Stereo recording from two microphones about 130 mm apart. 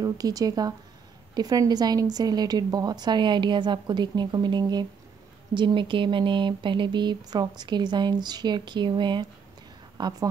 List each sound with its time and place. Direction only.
0.0 s a woman's voice: 30° right (ahead or behind)